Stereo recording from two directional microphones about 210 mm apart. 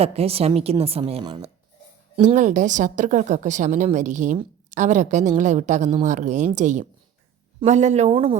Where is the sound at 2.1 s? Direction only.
35° right (ahead or behind).